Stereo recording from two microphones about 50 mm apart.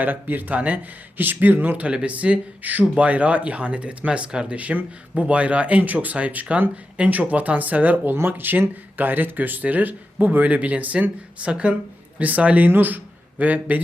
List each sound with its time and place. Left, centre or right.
0.0 s speech: right; by 4.5 s centre
4.5 s speech: right